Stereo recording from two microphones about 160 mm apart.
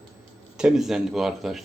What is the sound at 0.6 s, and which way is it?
Speech, 5° right (ahead or behind).